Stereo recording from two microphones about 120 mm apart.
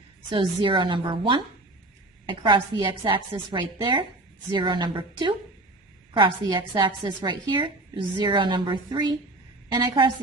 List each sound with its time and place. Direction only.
0.3 s a woman's voice: 45° right (ahead or behind)